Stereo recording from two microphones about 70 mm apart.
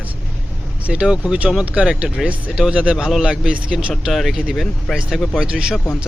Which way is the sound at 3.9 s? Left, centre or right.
Centre.